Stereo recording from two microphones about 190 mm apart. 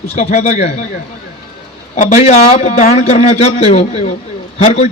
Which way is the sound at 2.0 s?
40° left (ahead or behind).